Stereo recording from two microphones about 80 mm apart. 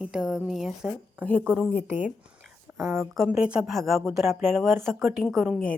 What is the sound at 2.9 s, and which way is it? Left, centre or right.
Speech, centre.